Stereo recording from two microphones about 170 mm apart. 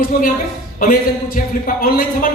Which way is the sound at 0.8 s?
55° left (ahead or behind).